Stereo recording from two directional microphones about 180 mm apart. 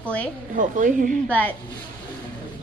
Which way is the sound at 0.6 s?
45° right (ahead or behind).